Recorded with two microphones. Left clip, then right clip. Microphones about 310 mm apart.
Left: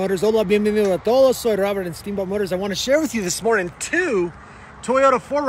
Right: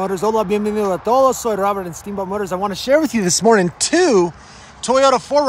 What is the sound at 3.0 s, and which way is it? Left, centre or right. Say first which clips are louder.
Speech: right 5 dB; right.